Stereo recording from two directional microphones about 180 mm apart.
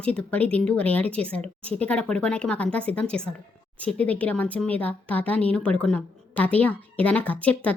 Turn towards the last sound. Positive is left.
turn(degrees=10)  # may be behind; listen again after turning